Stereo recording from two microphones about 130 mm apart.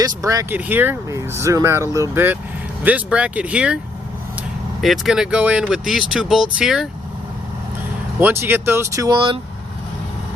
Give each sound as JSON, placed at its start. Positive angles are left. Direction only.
{"t": 0.0, "sound": "speech", "side_deg": -25}
{"t": 0.5, "sound": "speech", "side_deg": -15}
{"t": 4.8, "sound": "speech", "side_deg": 0}
{"t": 8.2, "sound": "speech", "side_deg": -20}
{"t": 9.0, "sound": "speech", "side_deg": -35}